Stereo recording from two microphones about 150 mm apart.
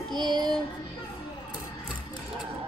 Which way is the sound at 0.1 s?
30° right (ahead or behind).